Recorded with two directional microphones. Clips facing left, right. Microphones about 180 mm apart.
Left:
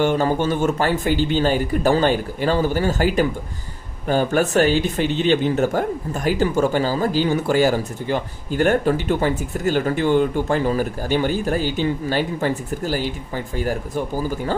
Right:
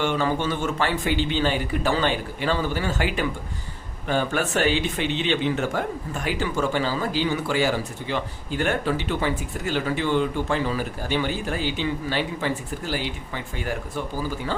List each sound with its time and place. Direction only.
0.0 s speech: 45° left (ahead or behind)